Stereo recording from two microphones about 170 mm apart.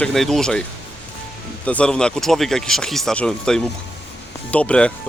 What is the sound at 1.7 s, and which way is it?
Speech, 5° left (ahead or behind).